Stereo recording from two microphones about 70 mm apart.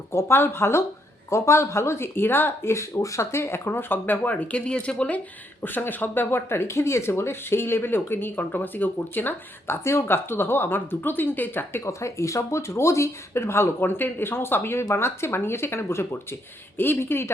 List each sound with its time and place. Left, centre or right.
0.1 s speech: left
2.7 s speech: left
11.9 s speech: left